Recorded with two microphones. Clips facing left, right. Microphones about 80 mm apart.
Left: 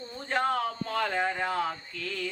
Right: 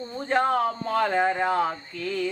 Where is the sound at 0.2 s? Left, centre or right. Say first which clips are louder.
Right 5 dB; right.